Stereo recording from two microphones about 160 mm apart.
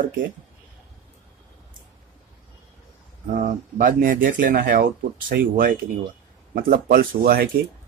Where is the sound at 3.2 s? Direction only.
55° right (ahead or behind).